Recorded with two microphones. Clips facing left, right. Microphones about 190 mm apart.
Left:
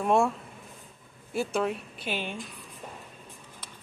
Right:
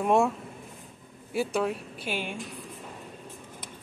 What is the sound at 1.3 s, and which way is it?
Speech, 15° right (ahead or behind).